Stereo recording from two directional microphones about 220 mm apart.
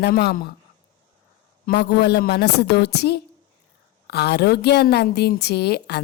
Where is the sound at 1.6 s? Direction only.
50° left (ahead or behind).